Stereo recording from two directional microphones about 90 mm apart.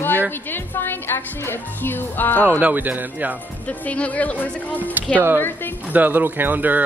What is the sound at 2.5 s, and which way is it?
Speech, 20° right (ahead or behind).